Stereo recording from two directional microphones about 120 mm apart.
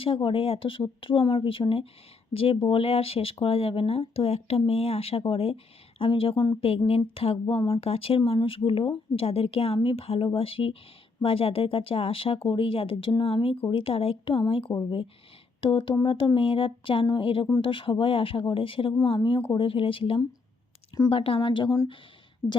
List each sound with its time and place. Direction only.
0.0 s speech: 45° left (ahead or behind)